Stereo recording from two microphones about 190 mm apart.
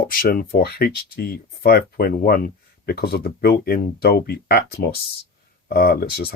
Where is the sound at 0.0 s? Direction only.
50° left (ahead or behind).